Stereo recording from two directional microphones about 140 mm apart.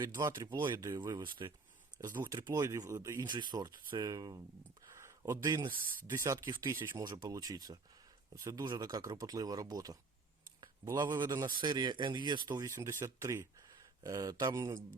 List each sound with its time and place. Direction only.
0.0 s speech: 30° right (ahead or behind)
2.0 s speech: 15° right (ahead or behind)
4.9 s a sound: 20° right (ahead or behind)
6.1 s speech: 20° right (ahead or behind)
10.6 s a sound: 25° right (ahead or behind)
11.2 s speech: 30° right (ahead or behind)